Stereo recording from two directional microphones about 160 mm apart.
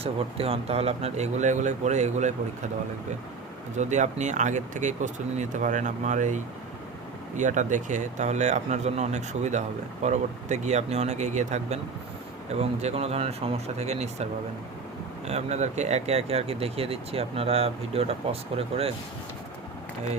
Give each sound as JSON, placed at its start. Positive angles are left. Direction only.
{"t": 0.0, "sound": "speech", "side_deg": -35}
{"t": 3.8, "sound": "speech", "side_deg": -50}
{"t": 15.3, "sound": "speech", "side_deg": -40}